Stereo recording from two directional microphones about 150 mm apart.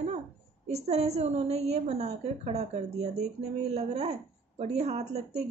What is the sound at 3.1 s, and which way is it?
Speech, 90° right.